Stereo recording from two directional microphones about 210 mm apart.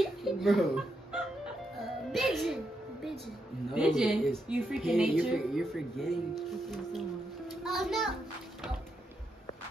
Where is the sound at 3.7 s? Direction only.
5° right (ahead or behind).